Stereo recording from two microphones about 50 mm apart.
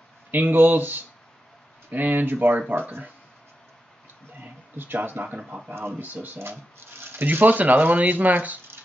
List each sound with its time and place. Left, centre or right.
0.3 s speech: right
4.4 s speech: right
5.8 s speech: right
7.0 s speech: right